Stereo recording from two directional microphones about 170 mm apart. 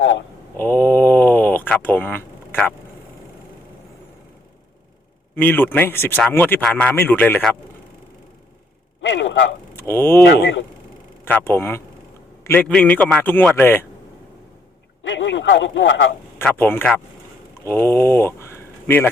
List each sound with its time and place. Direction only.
0.5 s a sound: 10° left (ahead or behind)
5.3 s speech: 10° left (ahead or behind)
9.0 s a sound: 90° left
9.7 s speech: 15° left (ahead or behind)
10.2 s speech: 80° left
11.3 s speech: 10° left (ahead or behind)
15.0 s speech: 90° left
16.4 s speech: 10° left (ahead or behind)